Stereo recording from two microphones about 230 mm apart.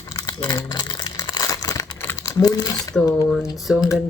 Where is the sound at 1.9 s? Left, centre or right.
Centre.